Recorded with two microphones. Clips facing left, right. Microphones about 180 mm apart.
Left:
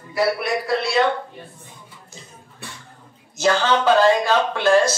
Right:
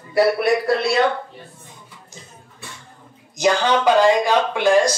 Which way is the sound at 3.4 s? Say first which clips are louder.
Right 1 dB; 15° right (ahead or behind).